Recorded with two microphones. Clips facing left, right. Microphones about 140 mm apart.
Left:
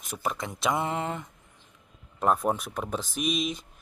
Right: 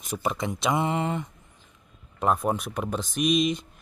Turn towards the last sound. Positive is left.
turn(degrees=0)  # may be behind; listen again after turning